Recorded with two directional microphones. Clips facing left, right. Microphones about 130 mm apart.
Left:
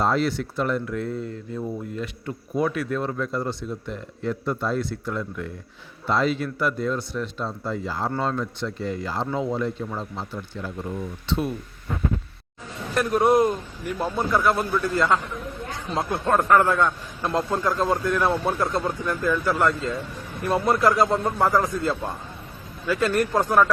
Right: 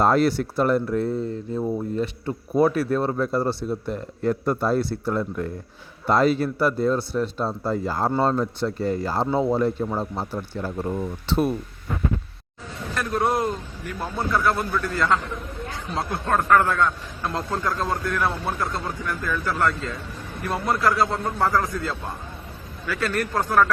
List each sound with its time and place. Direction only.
0.0 s speech: 45° right (ahead or behind)
12.9 s a man's voice: 20° left (ahead or behind)